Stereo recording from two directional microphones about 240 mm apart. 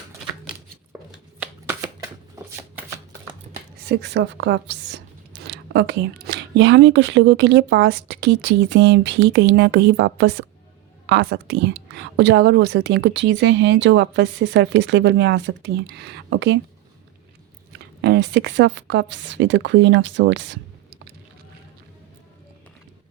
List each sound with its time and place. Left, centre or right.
1.1 s a sound: centre
3.8 s speech: right
17.7 s speech: right